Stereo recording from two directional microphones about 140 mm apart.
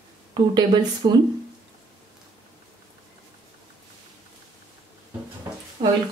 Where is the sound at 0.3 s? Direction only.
30° right (ahead or behind).